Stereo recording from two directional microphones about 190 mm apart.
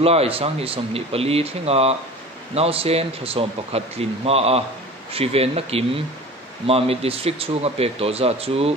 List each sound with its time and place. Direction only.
0.0 s speech: 30° right (ahead or behind)